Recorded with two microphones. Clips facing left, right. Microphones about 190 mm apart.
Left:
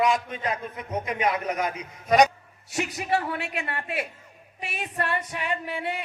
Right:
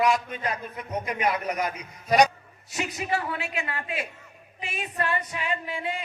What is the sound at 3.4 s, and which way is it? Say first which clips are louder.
Female singing: even; 65° left (ahead or behind).